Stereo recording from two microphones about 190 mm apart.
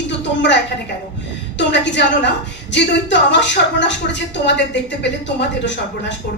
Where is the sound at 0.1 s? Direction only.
70° left (ahead or behind).